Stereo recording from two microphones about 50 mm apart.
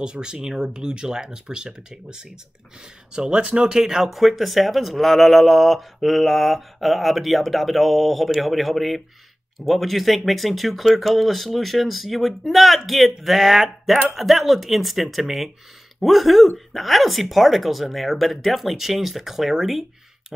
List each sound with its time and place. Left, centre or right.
0.0 s speech: centre